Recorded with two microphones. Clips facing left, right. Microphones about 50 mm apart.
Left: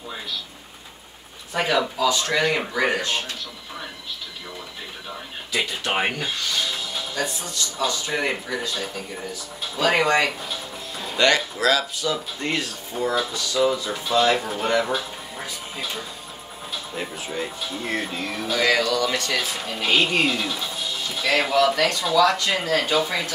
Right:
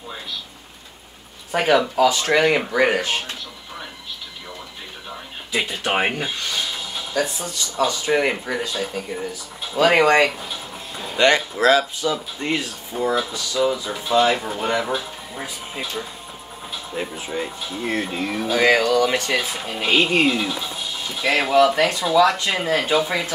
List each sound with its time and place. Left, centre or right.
1.6 s speech: centre
2.1 s speech: right
5.1 s a sound: centre
7.8 s speech: centre
8.7 s speech: centre
9.8 s speech: right
10.2 s music: centre
11.1 s speech: centre
12.1 s speech: centre
16.7 s speech: centre
18.6 s speech: right
19.4 s speech: centre
21.7 s speech: right